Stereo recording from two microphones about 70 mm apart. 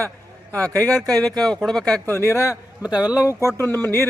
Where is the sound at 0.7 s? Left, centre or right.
Centre.